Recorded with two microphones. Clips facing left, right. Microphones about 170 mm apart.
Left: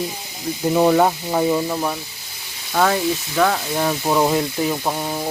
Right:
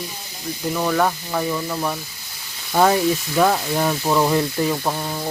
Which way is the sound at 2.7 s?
15° right (ahead or behind).